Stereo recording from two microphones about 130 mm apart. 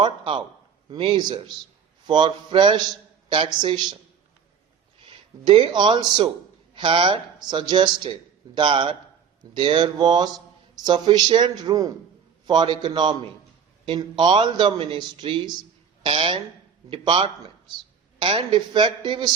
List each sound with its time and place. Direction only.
0.0 s speech: 40° right (ahead or behind)
5.0 s speech: 40° right (ahead or behind)